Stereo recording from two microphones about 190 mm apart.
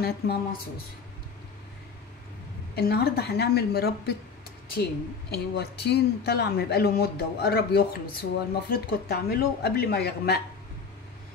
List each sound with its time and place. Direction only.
0.0 s speech: 55° left (ahead or behind)
2.7 s speech: 55° left (ahead or behind)
5.3 s speech: 60° left (ahead or behind)